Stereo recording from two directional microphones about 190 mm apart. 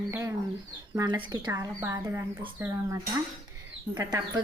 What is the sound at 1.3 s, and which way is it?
Speech, 20° right (ahead or behind).